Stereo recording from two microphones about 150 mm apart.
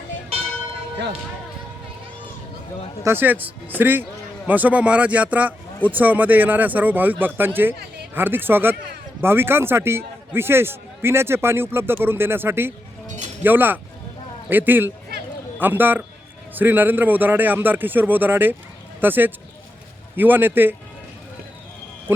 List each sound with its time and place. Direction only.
3.0 s a man's voice: 15° right (ahead or behind)
13.1 s chink: 50° right (ahead or behind)
13.4 s a man's voice: 15° right (ahead or behind)